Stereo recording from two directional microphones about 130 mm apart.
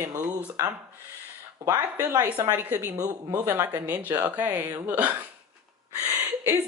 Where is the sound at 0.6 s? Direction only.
20° right (ahead or behind).